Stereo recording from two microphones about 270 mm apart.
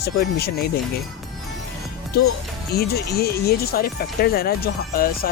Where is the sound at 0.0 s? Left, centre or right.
Left.